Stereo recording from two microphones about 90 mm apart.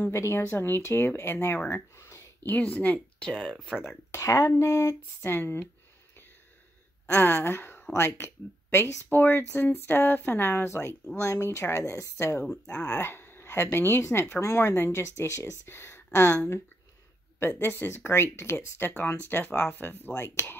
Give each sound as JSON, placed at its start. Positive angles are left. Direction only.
{"t": 0.0, "sound": "speech", "side_deg": 30}
{"t": 1.7, "sound": "a sound", "side_deg": 30}
{"t": 2.5, "sound": "speech", "side_deg": 20}
{"t": 4.1, "sound": "speech", "side_deg": 35}
{"t": 7.1, "sound": "a woman's voice", "side_deg": 30}
{"t": 12.4, "sound": "speech", "side_deg": 10}
{"t": 12.8, "sound": "speech", "side_deg": 30}